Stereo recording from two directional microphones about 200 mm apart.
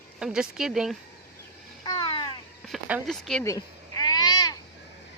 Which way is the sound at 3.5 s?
20° left (ahead or behind).